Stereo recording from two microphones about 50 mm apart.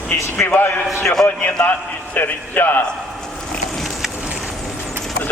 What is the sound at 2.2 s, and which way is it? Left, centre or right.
Speech, left.